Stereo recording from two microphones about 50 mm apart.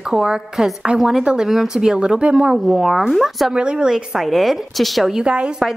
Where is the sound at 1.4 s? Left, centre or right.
Centre.